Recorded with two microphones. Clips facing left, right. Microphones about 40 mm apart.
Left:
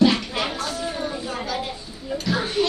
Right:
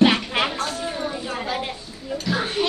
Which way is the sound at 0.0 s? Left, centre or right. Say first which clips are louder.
Right 1 dB; right.